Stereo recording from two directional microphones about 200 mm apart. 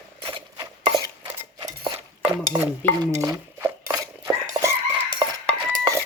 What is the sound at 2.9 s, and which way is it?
Dishes, 20° right (ahead or behind).